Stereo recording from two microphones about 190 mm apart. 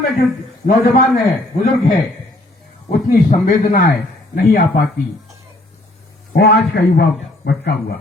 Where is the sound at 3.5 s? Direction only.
45° left (ahead or behind).